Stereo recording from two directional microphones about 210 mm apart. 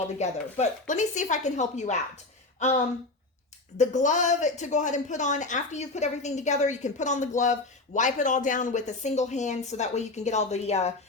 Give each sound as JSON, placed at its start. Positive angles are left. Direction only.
{"t": 0.2, "sound": "a woman's voice", "side_deg": 30}